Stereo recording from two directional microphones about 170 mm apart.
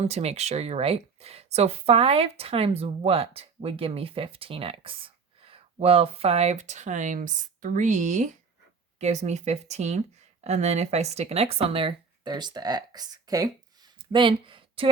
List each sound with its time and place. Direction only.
0.0 s speech: 40° right (ahead or behind)